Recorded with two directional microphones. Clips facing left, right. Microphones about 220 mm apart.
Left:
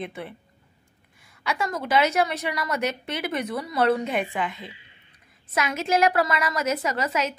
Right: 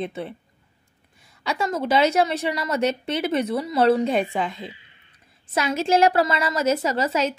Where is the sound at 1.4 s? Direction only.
25° right (ahead or behind).